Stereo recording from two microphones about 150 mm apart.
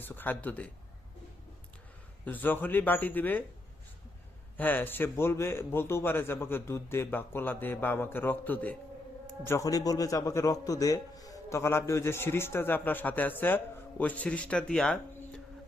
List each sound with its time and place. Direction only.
0.0 s a man's voice: 10° left (ahead or behind)
2.2 s a man's voice: 10° left (ahead or behind)
4.5 s a man's voice: 10° left (ahead or behind)